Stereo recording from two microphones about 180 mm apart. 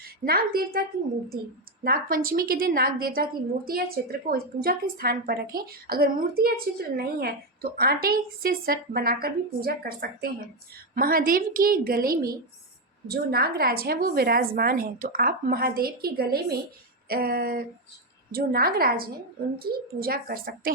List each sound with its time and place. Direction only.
0.0 s a woman's voice: 60° right (ahead or behind)